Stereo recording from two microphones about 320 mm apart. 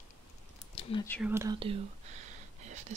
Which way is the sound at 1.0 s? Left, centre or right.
Centre.